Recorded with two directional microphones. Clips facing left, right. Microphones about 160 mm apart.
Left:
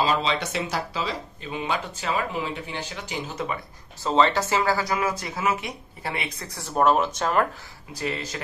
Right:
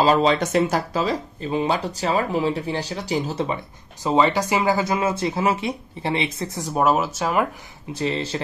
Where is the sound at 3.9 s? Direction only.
15° right (ahead or behind).